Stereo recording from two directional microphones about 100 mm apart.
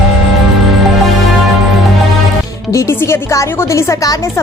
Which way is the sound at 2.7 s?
30° left (ahead or behind).